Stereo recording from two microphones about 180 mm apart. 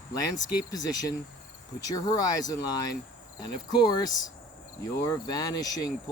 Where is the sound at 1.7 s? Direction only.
20° left (ahead or behind).